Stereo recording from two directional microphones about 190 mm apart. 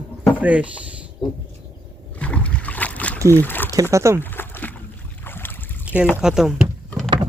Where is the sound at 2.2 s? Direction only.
5° left (ahead or behind).